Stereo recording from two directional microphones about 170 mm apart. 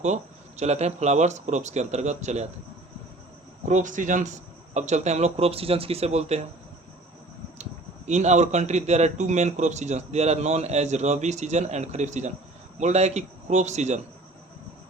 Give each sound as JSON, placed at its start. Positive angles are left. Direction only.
{"t": 0.0, "sound": "speech", "side_deg": -40}
{"t": 3.7, "sound": "a man's voice", "side_deg": -45}
{"t": 7.6, "sound": "a man's voice", "side_deg": -45}